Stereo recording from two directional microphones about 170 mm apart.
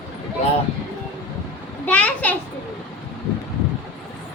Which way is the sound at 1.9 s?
5° left (ahead or behind).